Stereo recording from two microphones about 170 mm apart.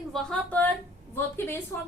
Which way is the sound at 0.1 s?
5° left (ahead or behind).